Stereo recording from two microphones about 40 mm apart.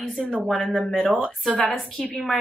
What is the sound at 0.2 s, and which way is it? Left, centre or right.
Speech, centre.